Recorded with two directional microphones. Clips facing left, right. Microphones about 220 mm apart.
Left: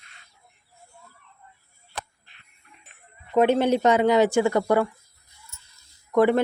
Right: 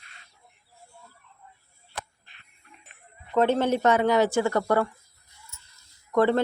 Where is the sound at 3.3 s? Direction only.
15° left (ahead or behind).